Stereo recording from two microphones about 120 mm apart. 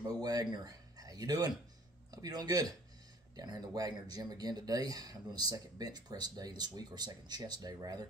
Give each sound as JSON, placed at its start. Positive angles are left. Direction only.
{"t": 0.0, "sound": "speech", "side_deg": -35}